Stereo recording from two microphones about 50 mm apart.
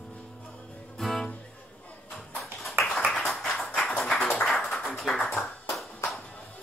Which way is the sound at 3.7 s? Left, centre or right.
Centre.